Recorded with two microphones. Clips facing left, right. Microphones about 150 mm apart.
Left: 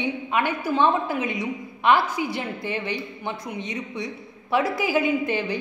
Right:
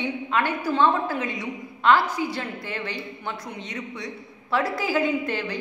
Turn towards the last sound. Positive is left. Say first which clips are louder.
# left 2 dB
turn(degrees=15)  # may be behind; listen again after turning